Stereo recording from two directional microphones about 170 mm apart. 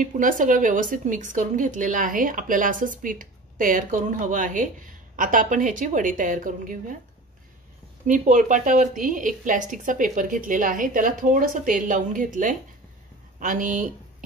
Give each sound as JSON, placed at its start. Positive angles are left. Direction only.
{"t": 0.0, "sound": "speech", "side_deg": -50}
{"t": 8.1, "sound": "speech", "side_deg": -45}